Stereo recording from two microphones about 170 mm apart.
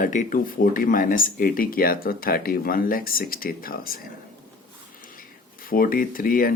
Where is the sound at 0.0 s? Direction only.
50° left (ahead or behind).